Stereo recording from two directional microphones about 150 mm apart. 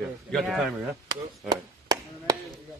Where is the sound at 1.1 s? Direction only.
25° right (ahead or behind).